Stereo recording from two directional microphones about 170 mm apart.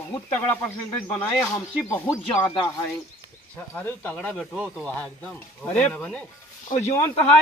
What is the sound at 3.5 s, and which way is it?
Speech, 10° left (ahead or behind).